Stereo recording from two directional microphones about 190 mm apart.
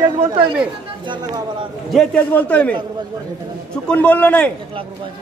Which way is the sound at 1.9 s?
5° left (ahead or behind).